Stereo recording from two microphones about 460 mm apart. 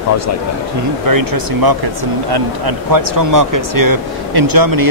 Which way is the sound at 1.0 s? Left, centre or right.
Right.